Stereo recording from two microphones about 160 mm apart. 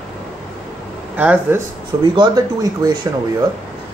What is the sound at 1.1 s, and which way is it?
Speech, 10° right (ahead or behind).